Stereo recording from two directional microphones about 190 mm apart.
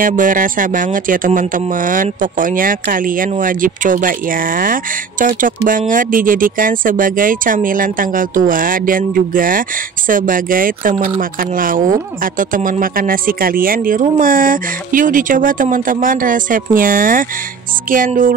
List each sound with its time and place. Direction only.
0.0 s speech: 45° right (ahead or behind)